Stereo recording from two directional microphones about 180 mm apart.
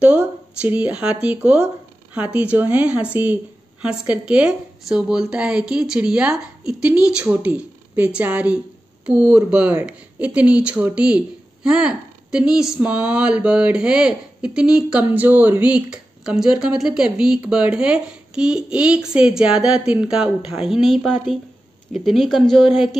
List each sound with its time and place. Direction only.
0.0 s speech: 5° right (ahead or behind)